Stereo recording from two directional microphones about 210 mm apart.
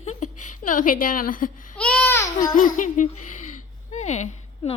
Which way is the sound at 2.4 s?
40° left (ahead or behind).